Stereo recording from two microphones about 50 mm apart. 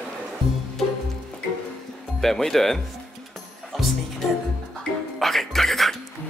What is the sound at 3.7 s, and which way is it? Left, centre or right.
Music, centre.